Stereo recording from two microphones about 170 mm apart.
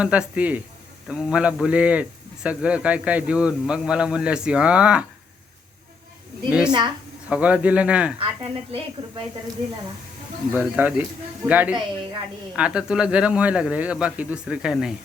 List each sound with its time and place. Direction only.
0.0 s a man's voice: 5° right (ahead or behind)
6.7 s a woman's voice: 25° right (ahead or behind)
7.3 s a man's voice: 5° right (ahead or behind)
8.2 s a woman's voice: 35° right (ahead or behind)
10.5 s a man's voice: 10° right (ahead or behind)